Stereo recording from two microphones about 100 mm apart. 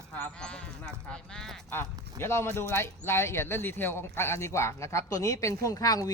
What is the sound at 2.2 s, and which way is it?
Speech, 25° left (ahead or behind).